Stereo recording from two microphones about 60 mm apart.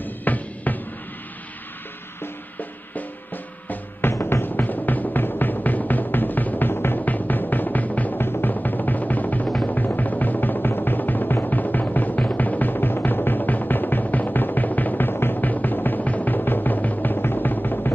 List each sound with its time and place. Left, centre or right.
0.0 s music: left
4.2 s music: left